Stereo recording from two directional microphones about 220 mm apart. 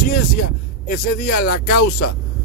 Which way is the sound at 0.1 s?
40° left (ahead or behind).